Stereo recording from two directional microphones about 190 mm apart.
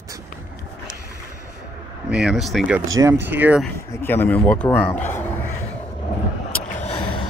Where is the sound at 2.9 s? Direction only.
15° right (ahead or behind).